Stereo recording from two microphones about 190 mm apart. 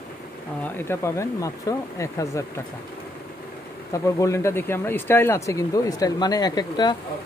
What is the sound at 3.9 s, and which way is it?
Speech, 15° left (ahead or behind).